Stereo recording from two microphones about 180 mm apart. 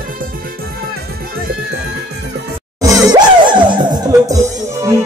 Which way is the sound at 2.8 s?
20° right (ahead or behind).